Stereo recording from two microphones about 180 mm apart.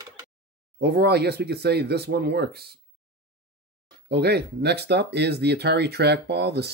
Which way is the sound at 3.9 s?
65° right (ahead or behind).